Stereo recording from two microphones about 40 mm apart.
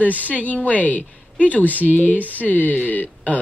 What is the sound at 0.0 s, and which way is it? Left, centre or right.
A woman's voice, left.